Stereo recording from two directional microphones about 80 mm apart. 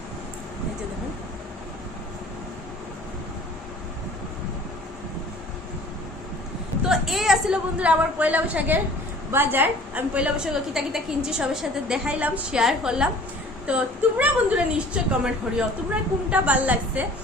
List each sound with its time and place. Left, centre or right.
6.8 s a woman's voice: centre